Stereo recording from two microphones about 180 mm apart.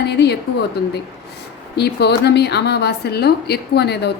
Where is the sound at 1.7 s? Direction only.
65° left (ahead or behind).